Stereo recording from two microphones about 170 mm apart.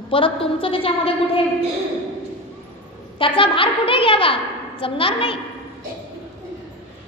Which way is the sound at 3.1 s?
30° left (ahead or behind).